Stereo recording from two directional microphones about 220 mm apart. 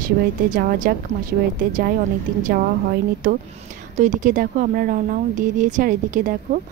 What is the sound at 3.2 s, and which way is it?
Speech, 35° right (ahead or behind).